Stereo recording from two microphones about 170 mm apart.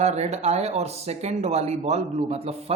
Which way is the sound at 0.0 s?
40° right (ahead or behind).